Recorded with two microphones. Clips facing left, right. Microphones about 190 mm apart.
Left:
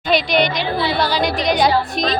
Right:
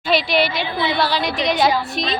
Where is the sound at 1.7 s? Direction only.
45° left (ahead or behind).